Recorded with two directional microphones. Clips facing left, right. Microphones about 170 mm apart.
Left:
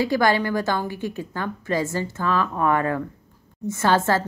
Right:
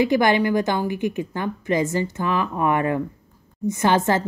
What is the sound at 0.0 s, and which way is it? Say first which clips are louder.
A woman's voice: right 2 dB; 20° right (ahead or behind).